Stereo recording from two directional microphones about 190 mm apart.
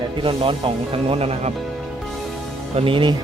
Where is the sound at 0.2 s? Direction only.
30° right (ahead or behind).